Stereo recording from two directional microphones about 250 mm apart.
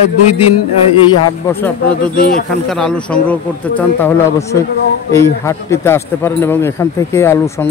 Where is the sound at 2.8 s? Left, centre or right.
Centre.